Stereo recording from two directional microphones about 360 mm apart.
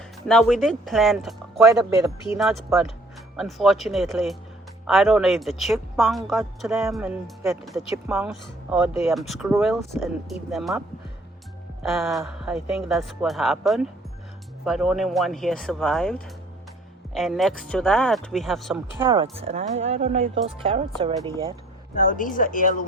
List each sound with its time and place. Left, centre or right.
0.3 s a woman's voice: centre
19.0 s speech: centre
21.9 s speech: left